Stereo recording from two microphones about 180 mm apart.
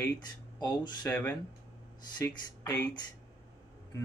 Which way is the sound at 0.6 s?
25° left (ahead or behind).